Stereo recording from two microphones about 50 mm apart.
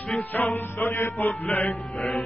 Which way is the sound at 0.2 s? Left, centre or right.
Left.